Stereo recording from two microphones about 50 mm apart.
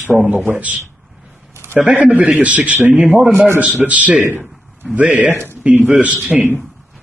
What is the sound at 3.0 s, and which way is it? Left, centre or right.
Speech, centre.